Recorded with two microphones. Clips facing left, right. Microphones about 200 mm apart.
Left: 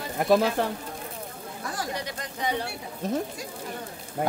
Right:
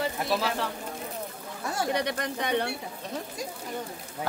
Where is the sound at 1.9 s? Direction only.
65° right (ahead or behind).